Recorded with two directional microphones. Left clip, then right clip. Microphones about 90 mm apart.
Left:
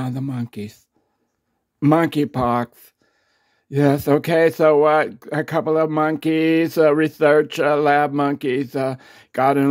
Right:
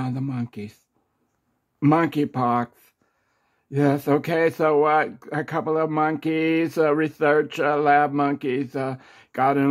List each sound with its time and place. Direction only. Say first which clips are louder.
0.3 s speech: left 2 dB; 35° left (ahead or behind)
1.9 s speech: left 3 dB; 35° left (ahead or behind)